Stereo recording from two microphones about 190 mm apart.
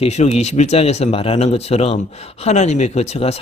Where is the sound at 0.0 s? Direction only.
35° left (ahead or behind).